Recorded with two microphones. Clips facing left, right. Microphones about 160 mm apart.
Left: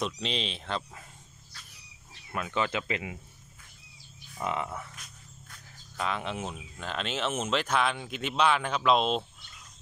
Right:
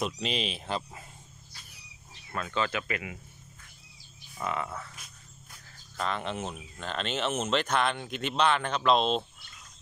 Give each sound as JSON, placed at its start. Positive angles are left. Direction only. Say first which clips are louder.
{"t": 0.0, "sound": "speech", "louder": "right 1 dB", "side_deg": -5}
{"t": 2.3, "sound": "speech", "louder": "left 1 dB", "side_deg": 15}
{"t": 4.4, "sound": "speech", "louder": "left 1 dB", "side_deg": 20}
{"t": 5.9, "sound": "speech", "louder": "even", "side_deg": 5}